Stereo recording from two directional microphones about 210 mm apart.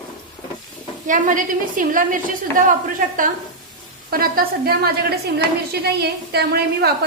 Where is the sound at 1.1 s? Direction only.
40° right (ahead or behind).